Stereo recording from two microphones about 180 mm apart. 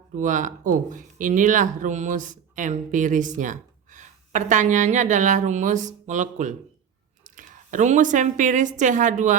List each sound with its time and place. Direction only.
0.2 s a woman's voice: 45° right (ahead or behind)